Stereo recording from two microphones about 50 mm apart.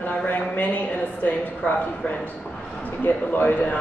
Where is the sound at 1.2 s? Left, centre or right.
Left.